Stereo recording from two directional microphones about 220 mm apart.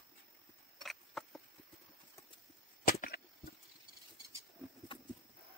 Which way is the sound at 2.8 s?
40° left (ahead or behind).